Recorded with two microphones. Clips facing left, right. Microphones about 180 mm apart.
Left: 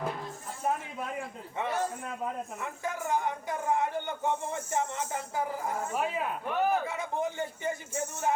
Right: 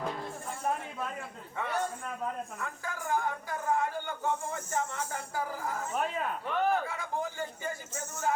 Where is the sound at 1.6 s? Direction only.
20° left (ahead or behind).